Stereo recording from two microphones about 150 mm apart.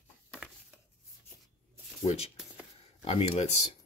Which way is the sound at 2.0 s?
45° left (ahead or behind).